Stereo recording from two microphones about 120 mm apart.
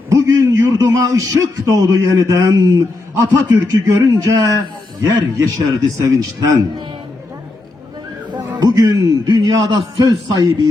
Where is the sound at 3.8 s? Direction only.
25° right (ahead or behind).